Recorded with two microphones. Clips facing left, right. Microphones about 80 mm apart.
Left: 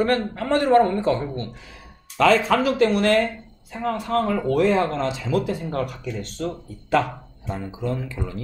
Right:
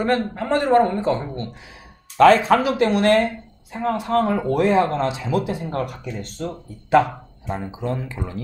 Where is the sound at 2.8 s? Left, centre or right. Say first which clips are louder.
Right 2 dB; right.